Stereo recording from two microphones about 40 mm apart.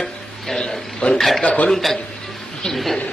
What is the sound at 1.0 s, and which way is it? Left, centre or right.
Speech, left.